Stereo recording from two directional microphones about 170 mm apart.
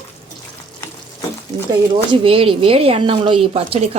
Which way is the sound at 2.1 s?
35° right (ahead or behind).